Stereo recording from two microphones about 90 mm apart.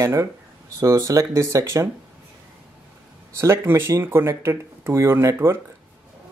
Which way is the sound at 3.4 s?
30° right (ahead or behind).